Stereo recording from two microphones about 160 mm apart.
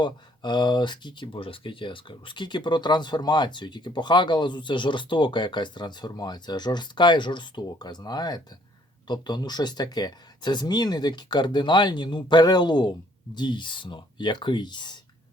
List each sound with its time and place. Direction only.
0.0 s speech: 30° left (ahead or behind)